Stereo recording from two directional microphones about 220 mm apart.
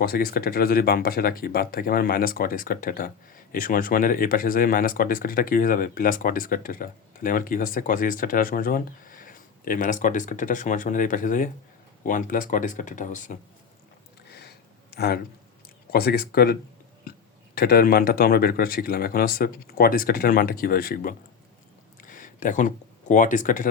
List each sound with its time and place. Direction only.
0.0 s speech: 45° left (ahead or behind)
14.3 s a sound: 50° left (ahead or behind)
15.9 s speech: 45° left (ahead or behind)